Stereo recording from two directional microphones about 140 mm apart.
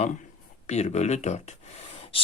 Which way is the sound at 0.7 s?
55° left (ahead or behind).